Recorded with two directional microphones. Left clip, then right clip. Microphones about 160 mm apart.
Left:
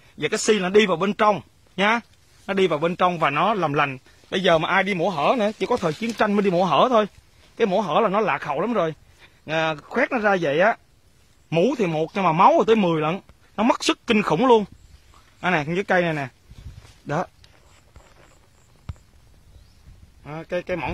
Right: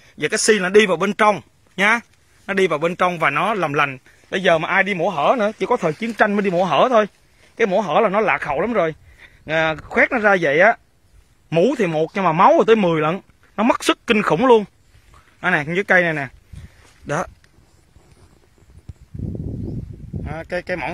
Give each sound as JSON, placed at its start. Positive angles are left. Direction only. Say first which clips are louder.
{"t": 0.2, "sound": "speech", "louder": "right 4 dB", "side_deg": -15}
{"t": 6.3, "sound": "speech", "louder": "right 2 dB", "side_deg": 15}
{"t": 6.8, "sound": "speech", "louder": "right 3 dB", "side_deg": 0}
{"t": 13.1, "sound": "a sound", "louder": "right 3 dB", "side_deg": -5}
{"t": 13.8, "sound": "speech", "louder": "right 4 dB", "side_deg": -10}
{"t": 20.2, "sound": "speech", "louder": "right 2 dB", "side_deg": -5}